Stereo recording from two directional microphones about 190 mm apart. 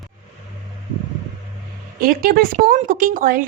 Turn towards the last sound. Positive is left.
turn(degrees=-45)  # may be behind; listen again after turning